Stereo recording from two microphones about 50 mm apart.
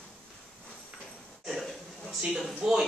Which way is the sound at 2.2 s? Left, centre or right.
Centre.